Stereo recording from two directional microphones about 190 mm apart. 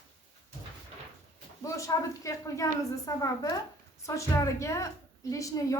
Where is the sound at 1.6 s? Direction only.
15° left (ahead or behind).